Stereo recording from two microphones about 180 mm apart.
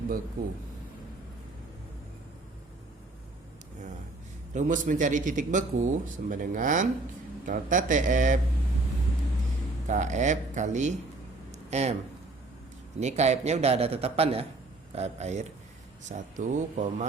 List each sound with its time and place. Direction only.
4.5 s a man's voice: 45° right (ahead or behind)
9.8 s a man's voice: 40° right (ahead or behind)
11.5 s a sound: 40° right (ahead or behind)
13.0 s a man's voice: 40° right (ahead or behind)